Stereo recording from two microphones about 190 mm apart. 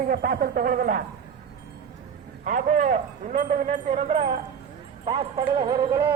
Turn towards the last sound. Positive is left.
turn(degrees=-20)  # may be behind; listen again after turning